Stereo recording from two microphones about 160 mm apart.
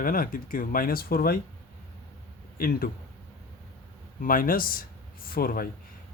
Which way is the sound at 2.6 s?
65° left (ahead or behind).